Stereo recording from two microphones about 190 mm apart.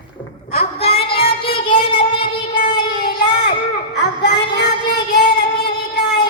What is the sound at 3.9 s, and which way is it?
Child singing, 60° left (ahead or behind).